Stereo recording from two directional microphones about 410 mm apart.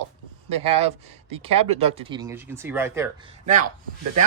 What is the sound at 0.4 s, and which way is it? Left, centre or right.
A woman's voice, centre.